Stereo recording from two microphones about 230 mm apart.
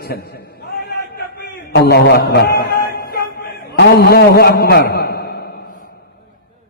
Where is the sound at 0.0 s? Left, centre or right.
Left.